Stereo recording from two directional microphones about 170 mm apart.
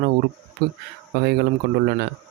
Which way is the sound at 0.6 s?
70° right (ahead or behind).